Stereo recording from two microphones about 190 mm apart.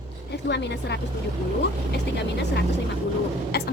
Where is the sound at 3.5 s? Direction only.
55° left (ahead or behind).